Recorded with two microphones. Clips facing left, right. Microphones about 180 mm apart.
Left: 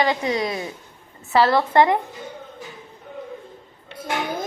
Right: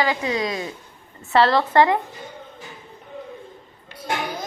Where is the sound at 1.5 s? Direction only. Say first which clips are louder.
Even; 15° left (ahead or behind).